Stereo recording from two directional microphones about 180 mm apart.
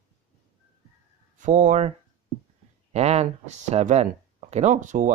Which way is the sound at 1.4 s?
40° right (ahead or behind).